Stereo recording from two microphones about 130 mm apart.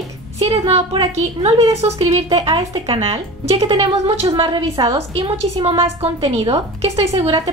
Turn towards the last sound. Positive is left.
turn(degrees=-50)  # may be behind; listen again after turning